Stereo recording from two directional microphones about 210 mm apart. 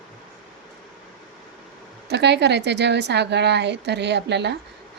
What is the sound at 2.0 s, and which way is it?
A woman's voice, 55° right (ahead or behind).